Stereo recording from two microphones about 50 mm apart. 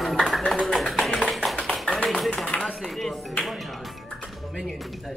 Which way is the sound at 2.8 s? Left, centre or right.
Centre.